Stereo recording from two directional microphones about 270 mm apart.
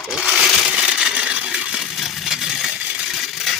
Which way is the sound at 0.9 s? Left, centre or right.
Centre.